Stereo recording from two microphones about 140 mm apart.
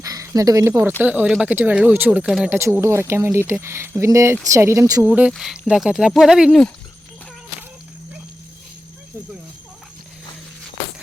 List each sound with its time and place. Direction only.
0.0 s speech: 25° right (ahead or behind); by 2.6 s 5° right (ahead or behind)
2.6 s speech: 20° right (ahead or behind)
5.0 s speech: 10° right (ahead or behind)